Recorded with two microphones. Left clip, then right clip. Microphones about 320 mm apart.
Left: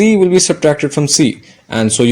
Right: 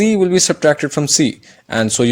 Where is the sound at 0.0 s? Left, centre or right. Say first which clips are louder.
Left 4 dB; right.